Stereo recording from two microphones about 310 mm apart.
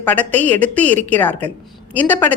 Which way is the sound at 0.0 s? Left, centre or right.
Centre.